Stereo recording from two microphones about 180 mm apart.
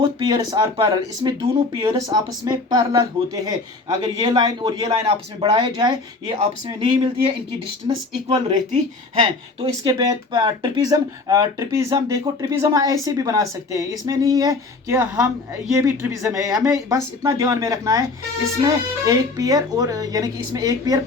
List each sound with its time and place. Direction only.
0.0 s speech: 20° right (ahead or behind)